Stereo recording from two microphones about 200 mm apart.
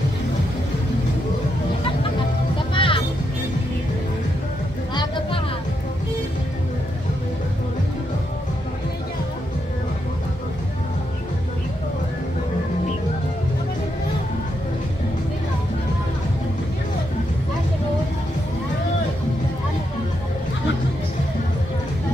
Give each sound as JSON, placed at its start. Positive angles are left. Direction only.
{"t": 2.7, "sound": "music", "side_deg": 25}